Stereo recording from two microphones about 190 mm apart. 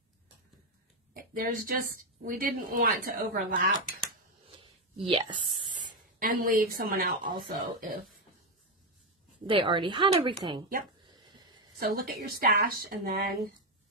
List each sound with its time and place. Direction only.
1.1 s speech: 45° right (ahead or behind)
4.5 s writing: 30° right (ahead or behind)
6.1 s speech: 45° right (ahead or behind)
9.5 s speech: 25° right (ahead or behind)
11.1 s a sound: 20° right (ahead or behind)
11.8 s speech: 50° right (ahead or behind)